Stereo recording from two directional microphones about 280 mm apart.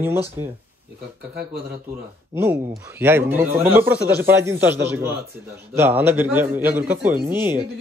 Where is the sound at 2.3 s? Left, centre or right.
Centre.